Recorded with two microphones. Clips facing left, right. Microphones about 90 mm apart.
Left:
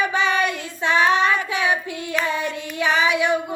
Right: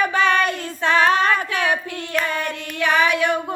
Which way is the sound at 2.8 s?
55° right (ahead or behind).